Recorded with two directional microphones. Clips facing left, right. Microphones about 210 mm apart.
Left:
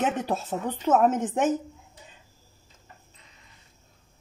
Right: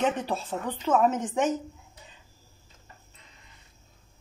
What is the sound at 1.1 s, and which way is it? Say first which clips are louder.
Speech: left 2 dB; 50° left (ahead or behind).